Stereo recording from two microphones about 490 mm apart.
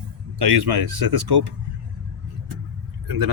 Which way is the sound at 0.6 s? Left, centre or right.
Right.